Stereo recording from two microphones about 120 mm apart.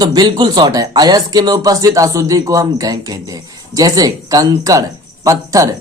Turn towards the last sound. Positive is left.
turn(degrees=-25)  # may be behind; listen again after turning